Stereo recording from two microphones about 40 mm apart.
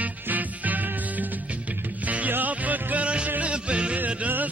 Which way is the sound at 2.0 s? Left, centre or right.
Right.